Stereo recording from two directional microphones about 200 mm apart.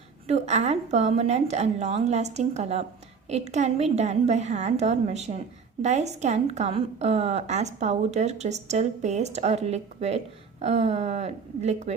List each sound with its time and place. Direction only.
0.3 s a woman's voice: 35° right (ahead or behind)